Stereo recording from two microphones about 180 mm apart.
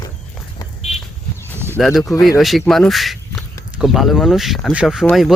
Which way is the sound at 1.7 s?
Centre (ahead or behind).